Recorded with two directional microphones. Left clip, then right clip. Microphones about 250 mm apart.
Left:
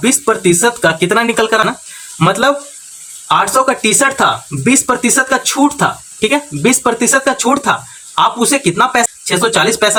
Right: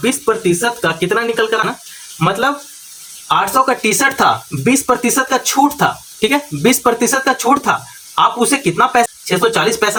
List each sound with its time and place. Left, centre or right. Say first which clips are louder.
0.0 s speech: left 3 dB; centre